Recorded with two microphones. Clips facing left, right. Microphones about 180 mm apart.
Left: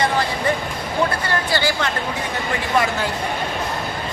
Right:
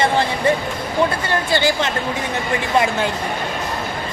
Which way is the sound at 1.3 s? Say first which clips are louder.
Right 3 dB; 20° right (ahead or behind).